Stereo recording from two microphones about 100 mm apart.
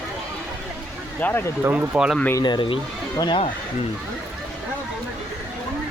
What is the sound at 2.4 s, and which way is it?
Speech, 50° left (ahead or behind).